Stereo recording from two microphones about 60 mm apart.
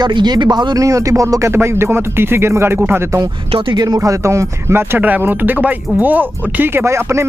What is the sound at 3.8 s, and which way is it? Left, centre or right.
Speech, right.